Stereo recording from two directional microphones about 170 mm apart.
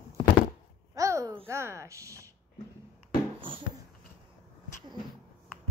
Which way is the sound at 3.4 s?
30° right (ahead or behind).